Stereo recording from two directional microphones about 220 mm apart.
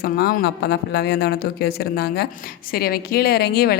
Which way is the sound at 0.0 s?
45° left (ahead or behind).